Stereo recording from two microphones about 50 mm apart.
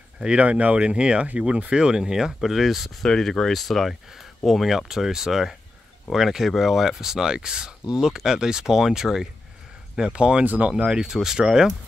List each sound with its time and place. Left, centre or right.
0.2 s speech: right; by 2.9 s centre
3.0 s speech: centre
10.1 s speech: right
10.4 s speech: right
10.7 s speech: centre